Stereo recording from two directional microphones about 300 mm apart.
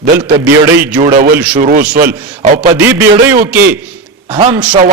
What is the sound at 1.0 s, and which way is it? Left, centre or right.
Speech, right.